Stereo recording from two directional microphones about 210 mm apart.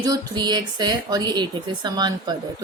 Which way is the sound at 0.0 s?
20° right (ahead or behind).